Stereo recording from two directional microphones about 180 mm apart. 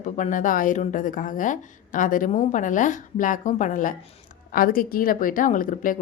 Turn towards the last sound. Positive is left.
turn(degrees=50)  # may be behind; listen again after turning